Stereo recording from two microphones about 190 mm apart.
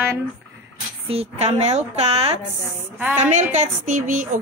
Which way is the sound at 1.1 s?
35° right (ahead or behind).